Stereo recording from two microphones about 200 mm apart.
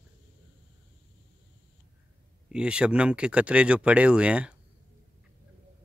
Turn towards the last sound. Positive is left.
turn(degrees=-5)  # may be behind; listen again after turning